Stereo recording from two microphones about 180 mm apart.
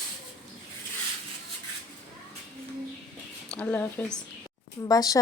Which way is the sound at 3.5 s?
10° left (ahead or behind).